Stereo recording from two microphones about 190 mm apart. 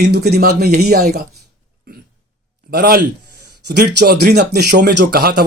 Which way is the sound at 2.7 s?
55° right (ahead or behind).